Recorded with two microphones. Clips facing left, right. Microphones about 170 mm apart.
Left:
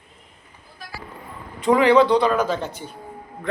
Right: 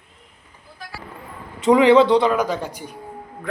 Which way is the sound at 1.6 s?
20° right (ahead or behind).